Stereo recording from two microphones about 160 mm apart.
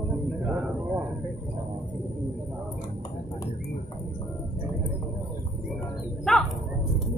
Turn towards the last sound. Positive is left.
turn(degrees=5)  # may be behind; listen again after turning